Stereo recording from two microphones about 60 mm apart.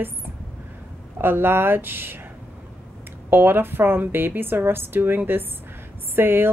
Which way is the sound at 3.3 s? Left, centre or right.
Right.